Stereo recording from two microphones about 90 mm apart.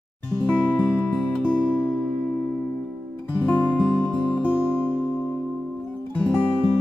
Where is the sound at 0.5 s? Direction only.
15° left (ahead or behind).